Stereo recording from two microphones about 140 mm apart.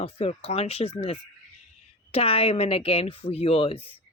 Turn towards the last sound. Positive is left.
turn(degrees=40)  # may be behind; listen again after turning